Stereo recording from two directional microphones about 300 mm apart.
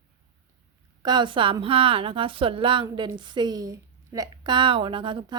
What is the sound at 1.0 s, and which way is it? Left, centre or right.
A woman's voice, centre.